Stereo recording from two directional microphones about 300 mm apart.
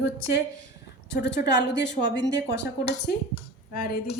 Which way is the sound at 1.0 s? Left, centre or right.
Left.